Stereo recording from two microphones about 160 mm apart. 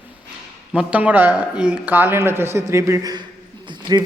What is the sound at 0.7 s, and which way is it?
A man's voice, 5° right (ahead or behind).